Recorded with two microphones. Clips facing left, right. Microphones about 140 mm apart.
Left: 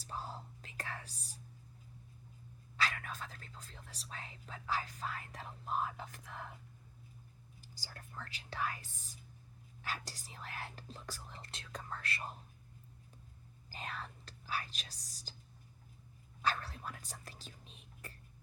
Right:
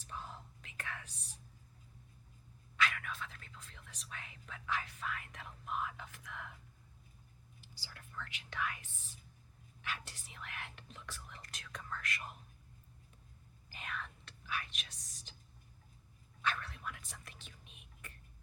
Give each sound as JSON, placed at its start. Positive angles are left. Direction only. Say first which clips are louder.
{"t": 0.0, "sound": "whispering", "louder": "left 3 dB", "side_deg": 35}
{"t": 2.7, "sound": "speech", "louder": "right 1 dB", "side_deg": 35}
{"t": 7.6, "sound": "speech", "louder": "left 3 dB", "side_deg": 40}
{"t": 13.7, "sound": "speech", "louder": "left 1 dB", "side_deg": 35}
{"t": 16.4, "sound": "speech", "louder": "left 2 dB", "side_deg": 35}